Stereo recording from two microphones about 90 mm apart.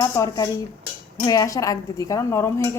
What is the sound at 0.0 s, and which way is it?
Speech, 40° left (ahead or behind).